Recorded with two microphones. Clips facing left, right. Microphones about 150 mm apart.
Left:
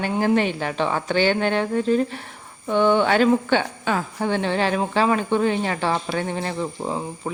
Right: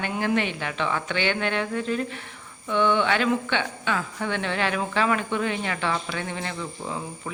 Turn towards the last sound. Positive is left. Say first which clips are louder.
# left 6 dB
turn(degrees=35)  # may be behind; listen again after turning